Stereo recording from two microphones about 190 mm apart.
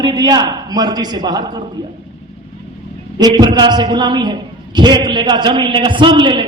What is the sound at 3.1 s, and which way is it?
A man's voice, 20° right (ahead or behind).